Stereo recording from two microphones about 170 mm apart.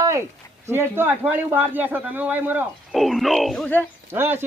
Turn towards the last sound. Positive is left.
turn(degrees=-15)  # may be behind; listen again after turning